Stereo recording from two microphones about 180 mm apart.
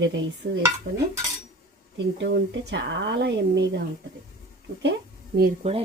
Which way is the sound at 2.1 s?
80° right.